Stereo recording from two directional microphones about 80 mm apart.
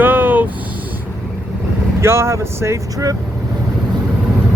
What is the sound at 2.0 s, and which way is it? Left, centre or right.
Speech, right.